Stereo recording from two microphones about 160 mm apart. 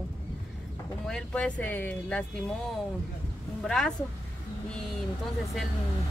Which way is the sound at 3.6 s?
5° left (ahead or behind).